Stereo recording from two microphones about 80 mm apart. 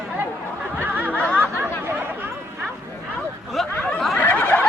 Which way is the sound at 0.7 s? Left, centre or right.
Right.